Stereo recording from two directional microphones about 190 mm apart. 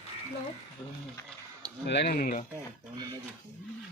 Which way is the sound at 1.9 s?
60° left (ahead or behind).